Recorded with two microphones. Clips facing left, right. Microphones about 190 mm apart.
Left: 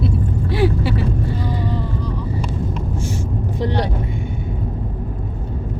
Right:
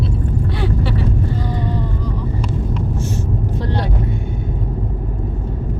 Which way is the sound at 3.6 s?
15° left (ahead or behind).